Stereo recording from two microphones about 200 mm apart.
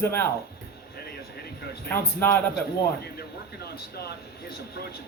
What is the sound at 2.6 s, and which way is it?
A man's voice, 50° left (ahead or behind).